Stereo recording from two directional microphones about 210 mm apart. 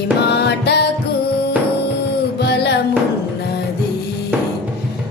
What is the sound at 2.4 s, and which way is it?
Music, 50° left (ahead or behind).